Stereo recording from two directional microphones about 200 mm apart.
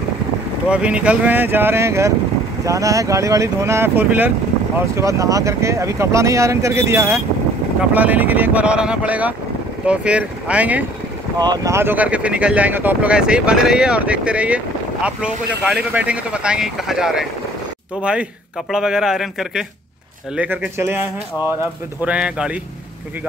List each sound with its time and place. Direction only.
0.7 s speech: 5° right (ahead or behind)
11.3 s speech: 20° right (ahead or behind); by 17.3 s centre (ahead or behind)
18.7 s speech: 5° right (ahead or behind)
22.0 s speech: 5° right (ahead or behind)